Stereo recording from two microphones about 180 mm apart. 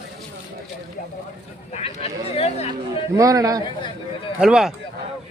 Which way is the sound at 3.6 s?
25° left (ahead or behind).